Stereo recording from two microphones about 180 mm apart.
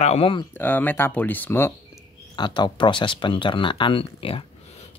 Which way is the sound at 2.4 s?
25° left (ahead or behind).